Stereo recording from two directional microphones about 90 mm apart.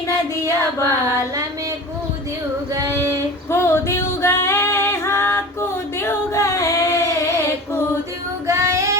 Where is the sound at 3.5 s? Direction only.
30° left (ahead or behind).